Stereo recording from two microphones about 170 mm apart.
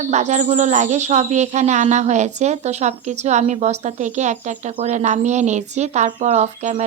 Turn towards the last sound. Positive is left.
turn(degrees=-40)  # may be behind; listen again after turning